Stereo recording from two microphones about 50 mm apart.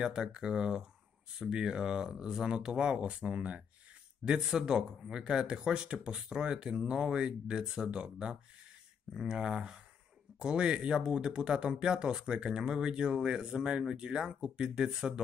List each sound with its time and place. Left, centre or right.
0.0 s speech: centre
4.2 s speech: centre